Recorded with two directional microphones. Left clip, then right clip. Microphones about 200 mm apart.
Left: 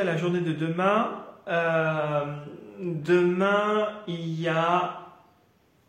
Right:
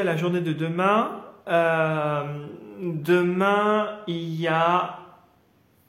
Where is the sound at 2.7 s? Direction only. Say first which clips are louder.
Right 1 dB; 40° right (ahead or behind).